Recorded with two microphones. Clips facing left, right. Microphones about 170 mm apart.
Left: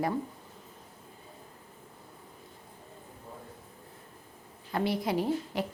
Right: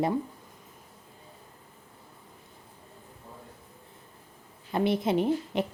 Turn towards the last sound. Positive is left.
turn(degrees=-20)  # may be behind; listen again after turning